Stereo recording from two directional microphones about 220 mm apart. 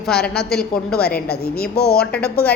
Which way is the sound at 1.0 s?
45° left (ahead or behind).